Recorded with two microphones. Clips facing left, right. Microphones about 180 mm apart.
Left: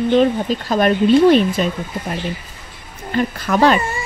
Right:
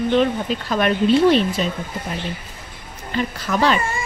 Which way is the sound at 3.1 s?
50° left (ahead or behind).